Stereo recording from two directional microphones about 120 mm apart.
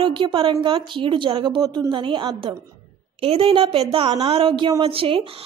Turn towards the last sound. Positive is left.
turn(degrees=-50)  # may be behind; listen again after turning